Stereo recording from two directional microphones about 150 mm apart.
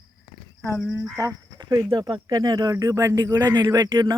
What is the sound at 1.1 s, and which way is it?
Speech, 25° right (ahead or behind).